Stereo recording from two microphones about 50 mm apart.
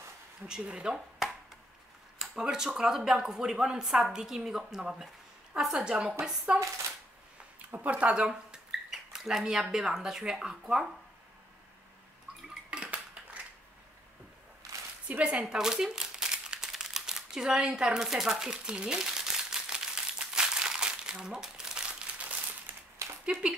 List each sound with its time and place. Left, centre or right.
0.5 s speech: centre
2.1 s a sound: centre
2.8 s speech: centre
7.5 s a sound: right; by 9.4 s centre
9.4 s speech: centre
12.7 s cutlery: right
15.0 s speech: right
15.3 s crumpling: centre
23.0 s a sound: right